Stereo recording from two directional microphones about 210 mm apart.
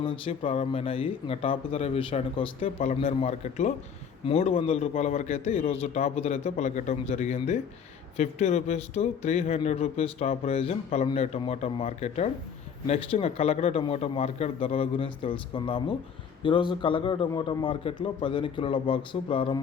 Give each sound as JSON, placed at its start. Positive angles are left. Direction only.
{"t": 0.0, "sound": "a man's voice", "side_deg": 25}